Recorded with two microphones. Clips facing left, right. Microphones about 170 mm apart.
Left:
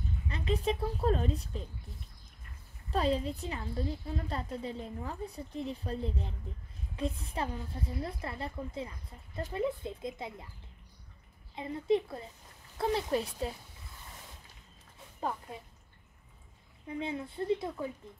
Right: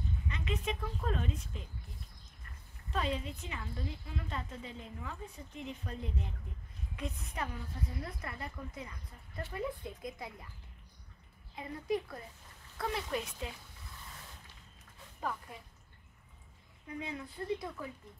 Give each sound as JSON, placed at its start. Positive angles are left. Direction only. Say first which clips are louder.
{"t": 0.3, "sound": "a woman's voice", "louder": "left 7 dB", "side_deg": 35}
{"t": 2.9, "sound": "a woman's voice", "louder": "left 6 dB", "side_deg": 35}
{"t": 11.5, "sound": "a woman's voice", "louder": "left 6 dB", "side_deg": 25}
{"t": 15.5, "sound": "a woman's voice", "louder": "left 5 dB", "side_deg": 25}
{"t": 16.8, "sound": "a woman's voice", "louder": "left 5 dB", "side_deg": 25}